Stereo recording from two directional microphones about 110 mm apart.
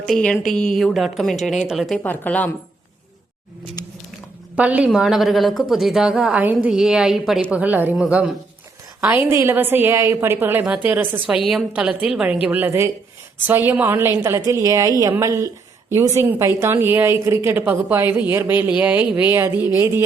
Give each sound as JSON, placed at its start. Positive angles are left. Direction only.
{"t": 0.0, "sound": "a woman's voice", "side_deg": 5}
{"t": 2.0, "sound": "speech", "side_deg": 15}
{"t": 3.8, "sound": "a sound", "side_deg": 35}
{"t": 4.5, "sound": "a woman's voice", "side_deg": -10}
{"t": 6.7, "sound": "a woman's voice", "side_deg": -5}